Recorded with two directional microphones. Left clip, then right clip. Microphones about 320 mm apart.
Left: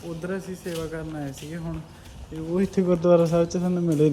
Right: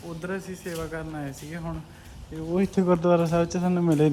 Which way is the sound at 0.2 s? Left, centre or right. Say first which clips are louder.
Right 1 dB; centre.